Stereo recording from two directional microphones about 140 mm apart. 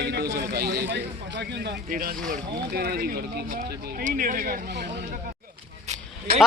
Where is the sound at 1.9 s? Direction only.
80° right.